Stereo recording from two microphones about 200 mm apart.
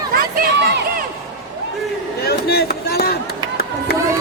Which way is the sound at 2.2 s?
50° left (ahead or behind).